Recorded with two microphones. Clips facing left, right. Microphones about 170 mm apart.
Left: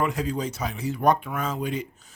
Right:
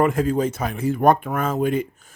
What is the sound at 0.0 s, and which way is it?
Speech, 50° right (ahead or behind).